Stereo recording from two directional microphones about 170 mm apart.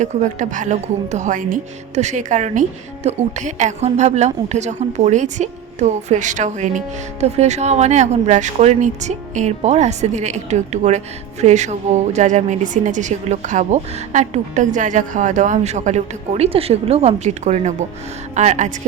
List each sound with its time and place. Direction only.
0.0 s a woman's voice: 45° right (ahead or behind)